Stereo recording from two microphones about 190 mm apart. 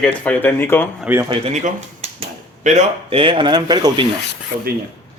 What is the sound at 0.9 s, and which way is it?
Speech, 10° right (ahead or behind).